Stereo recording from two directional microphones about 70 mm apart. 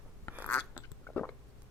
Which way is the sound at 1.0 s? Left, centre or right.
Left.